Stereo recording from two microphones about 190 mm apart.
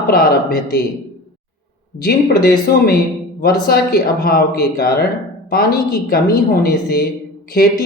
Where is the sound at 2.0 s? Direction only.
55° left (ahead or behind).